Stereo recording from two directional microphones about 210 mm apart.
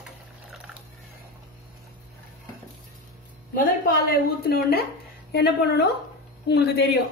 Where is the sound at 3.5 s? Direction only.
40° left (ahead or behind).